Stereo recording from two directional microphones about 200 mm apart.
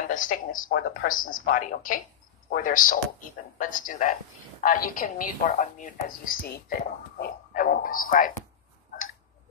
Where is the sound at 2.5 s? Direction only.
45° left (ahead or behind).